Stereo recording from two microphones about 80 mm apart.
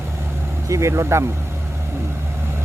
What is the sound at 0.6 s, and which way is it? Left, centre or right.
Speech, right.